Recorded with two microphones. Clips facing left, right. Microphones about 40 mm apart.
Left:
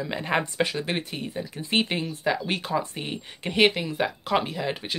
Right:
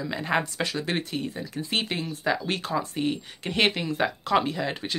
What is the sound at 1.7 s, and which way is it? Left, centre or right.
Speech, left.